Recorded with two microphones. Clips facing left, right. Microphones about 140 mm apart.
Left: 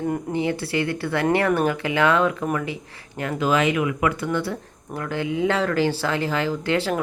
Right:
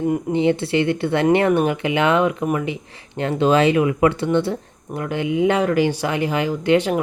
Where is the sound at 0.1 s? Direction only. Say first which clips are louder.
Right 6 dB; 20° right (ahead or behind).